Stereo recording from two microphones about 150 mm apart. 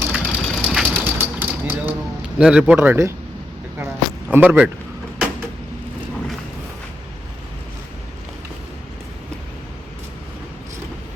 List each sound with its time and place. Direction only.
0.1 s vehicle: 5° right (ahead or behind)
2.4 s speech: 5° right (ahead or behind)
4.3 s speech: 10° right (ahead or behind)